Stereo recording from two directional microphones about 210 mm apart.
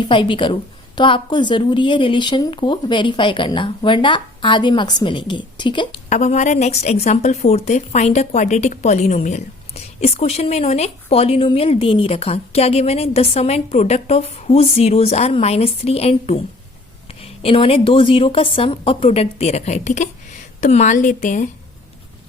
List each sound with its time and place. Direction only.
0.0 s speech: 25° left (ahead or behind)
6.1 s a woman's voice: 35° left (ahead or behind)